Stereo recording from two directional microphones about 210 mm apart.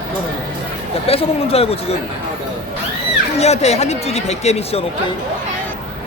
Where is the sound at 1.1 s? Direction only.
30° left (ahead or behind).